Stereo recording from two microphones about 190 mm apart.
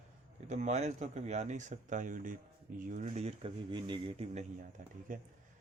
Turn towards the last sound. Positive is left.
turn(degrees=-45)  # may be behind; listen again after turning